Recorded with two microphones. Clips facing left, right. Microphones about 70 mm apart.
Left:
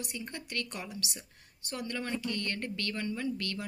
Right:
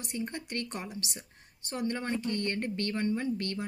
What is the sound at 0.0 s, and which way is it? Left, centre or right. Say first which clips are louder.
A woman's voice: right 4 dB; right.